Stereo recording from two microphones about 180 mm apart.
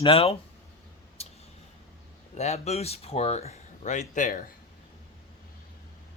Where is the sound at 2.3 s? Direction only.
40° left (ahead or behind).